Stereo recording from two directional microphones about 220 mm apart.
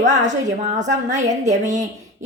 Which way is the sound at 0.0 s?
30° right (ahead or behind).